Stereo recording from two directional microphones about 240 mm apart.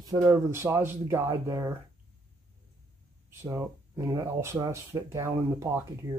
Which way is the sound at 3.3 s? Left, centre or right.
Centre.